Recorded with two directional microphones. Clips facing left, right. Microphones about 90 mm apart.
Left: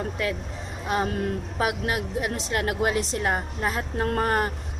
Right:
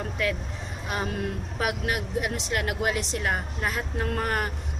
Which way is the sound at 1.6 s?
25° left (ahead or behind).